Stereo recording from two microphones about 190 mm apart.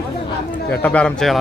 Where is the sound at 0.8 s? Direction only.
5° left (ahead or behind).